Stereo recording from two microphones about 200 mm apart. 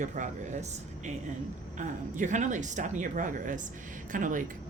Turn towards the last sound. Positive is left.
turn(degrees=-40)  # may be behind; listen again after turning